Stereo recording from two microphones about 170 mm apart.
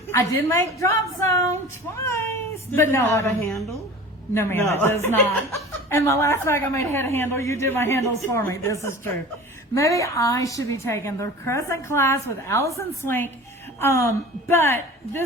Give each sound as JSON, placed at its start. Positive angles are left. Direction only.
{"t": 0.1, "sound": "a woman's voice", "side_deg": 15}